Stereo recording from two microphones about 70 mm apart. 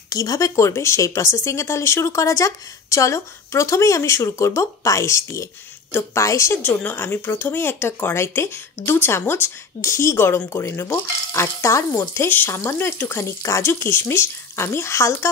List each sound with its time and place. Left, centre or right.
0.1 s speech: left
6.6 s speech: left
10.9 s speech: left